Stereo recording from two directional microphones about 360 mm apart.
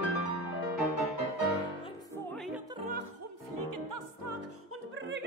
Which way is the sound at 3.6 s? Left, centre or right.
Right.